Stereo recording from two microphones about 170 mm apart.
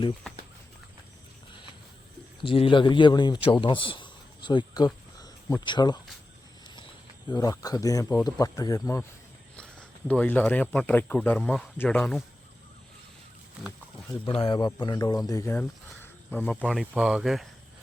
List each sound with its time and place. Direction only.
2.4 s a man's voice: 30° left (ahead or behind)
5.2 s cricket: 25° left (ahead or behind)
7.3 s speech: 20° left (ahead or behind)
10.1 s speech: 10° left (ahead or behind)
14.3 s speech: 30° left (ahead or behind); by 16.8 s 5° left (ahead or behind)
16.8 s speech: 5° right (ahead or behind)